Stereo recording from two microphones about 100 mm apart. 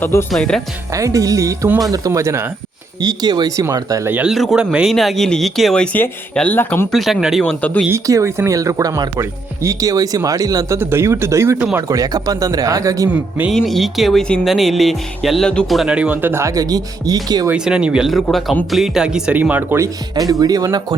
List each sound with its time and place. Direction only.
0.0 s speech: 25° left (ahead or behind)
0.3 s speech: 5° left (ahead or behind)
0.9 s speech: 35° right (ahead or behind)
3.0 s speech: 45° right (ahead or behind)
4.3 s speech: centre (ahead or behind); by 6.8 s 20° left (ahead or behind)
6.9 s speech: centre (ahead or behind)
7.9 s speech: 30° right (ahead or behind)
10.8 s speech: 25° right (ahead or behind)
11.9 s speech: 35° right (ahead or behind)
13.5 s speech: centre (ahead or behind)
15.8 s speech: 10° right (ahead or behind); by 17.5 s 40° right (ahead or behind)
17.5 s speech: 10° right (ahead or behind)
19.8 s speech: 35° right (ahead or behind)